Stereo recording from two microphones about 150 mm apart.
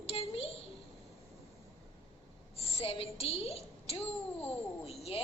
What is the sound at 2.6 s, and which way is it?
A child's voice, 45° left (ahead or behind).